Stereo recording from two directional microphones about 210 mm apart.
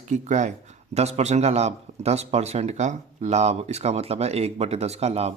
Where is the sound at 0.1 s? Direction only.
35° right (ahead or behind).